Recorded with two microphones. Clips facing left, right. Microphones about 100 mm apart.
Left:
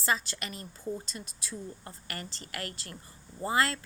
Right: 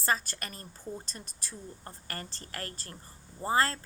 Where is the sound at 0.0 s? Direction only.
45° right (ahead or behind).